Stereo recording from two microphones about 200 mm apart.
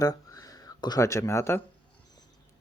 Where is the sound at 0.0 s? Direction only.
20° left (ahead or behind).